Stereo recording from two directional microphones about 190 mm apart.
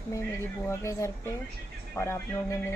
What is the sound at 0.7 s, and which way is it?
A woman's voice, 15° left (ahead or behind).